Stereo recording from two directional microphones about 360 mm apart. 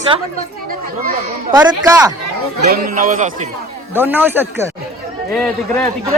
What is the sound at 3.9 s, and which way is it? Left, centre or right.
Speech, centre.